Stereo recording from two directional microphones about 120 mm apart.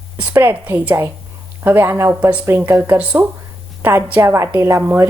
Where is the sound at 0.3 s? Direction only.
15° right (ahead or behind).